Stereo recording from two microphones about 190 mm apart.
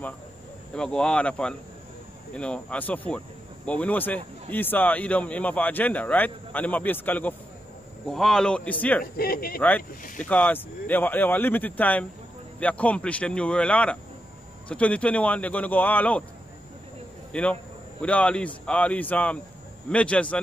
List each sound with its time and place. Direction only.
0.7 s a man's voice: 5° left (ahead or behind)
9.0 s speech: 50° left (ahead or behind)
9.6 s a man's voice: 10° left (ahead or behind)
17.3 s a man's voice: 5° left (ahead or behind)